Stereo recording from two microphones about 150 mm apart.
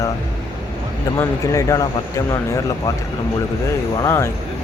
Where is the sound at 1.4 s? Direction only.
20° left (ahead or behind).